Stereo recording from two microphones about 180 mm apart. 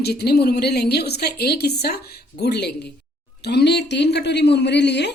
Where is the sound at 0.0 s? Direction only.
65° left (ahead or behind).